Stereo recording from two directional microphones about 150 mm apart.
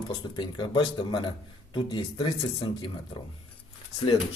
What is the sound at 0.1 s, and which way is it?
Speech, 30° left (ahead or behind).